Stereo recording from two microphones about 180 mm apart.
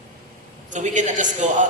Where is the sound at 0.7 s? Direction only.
40° right (ahead or behind).